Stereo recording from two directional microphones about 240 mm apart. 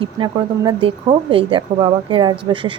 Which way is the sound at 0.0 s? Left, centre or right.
Right.